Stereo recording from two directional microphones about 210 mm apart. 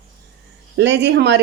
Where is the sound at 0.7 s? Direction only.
55° right (ahead or behind).